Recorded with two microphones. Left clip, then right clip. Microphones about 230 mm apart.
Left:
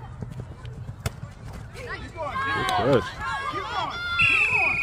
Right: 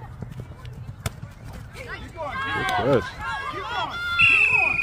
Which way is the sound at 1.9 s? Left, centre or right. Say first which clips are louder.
Even; centre.